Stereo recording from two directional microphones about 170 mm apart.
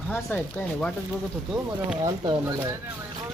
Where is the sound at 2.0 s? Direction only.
25° right (ahead or behind).